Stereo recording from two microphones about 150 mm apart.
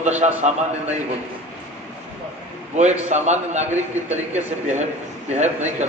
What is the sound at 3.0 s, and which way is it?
A man's voice, 50° right (ahead or behind).